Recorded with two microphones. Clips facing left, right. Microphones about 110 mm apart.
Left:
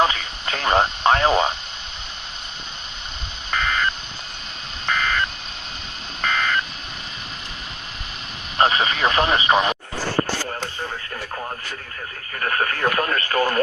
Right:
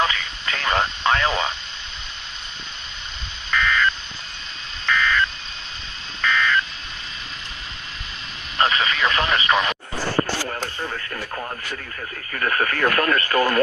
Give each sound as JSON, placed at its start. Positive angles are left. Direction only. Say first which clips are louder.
{"t": 0.0, "sound": "radio", "louder": "left 3 dB", "side_deg": 35}
{"t": 3.5, "sound": "a sound", "louder": "right 2 dB", "side_deg": 40}
{"t": 6.2, "sound": "telephone dialing", "louder": "right 2 dB", "side_deg": 40}
{"t": 8.6, "sound": "a sound", "louder": "left 2 dB", "side_deg": 30}
{"t": 12.3, "sound": "speech", "louder": "right 1 dB", "side_deg": 35}
{"t": 13.3, "sound": "speech", "louder": "even", "side_deg": -40}